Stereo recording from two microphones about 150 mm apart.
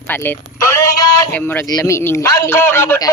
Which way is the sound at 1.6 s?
25° left (ahead or behind).